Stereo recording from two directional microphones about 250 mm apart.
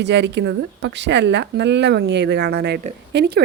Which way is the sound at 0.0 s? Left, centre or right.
Right.